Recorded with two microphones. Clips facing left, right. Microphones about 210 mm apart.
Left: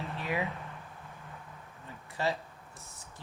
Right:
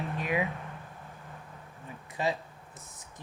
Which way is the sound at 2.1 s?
15° right (ahead or behind).